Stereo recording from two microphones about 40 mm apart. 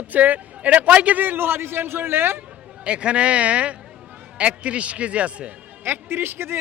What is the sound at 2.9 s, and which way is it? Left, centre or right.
Speech, right.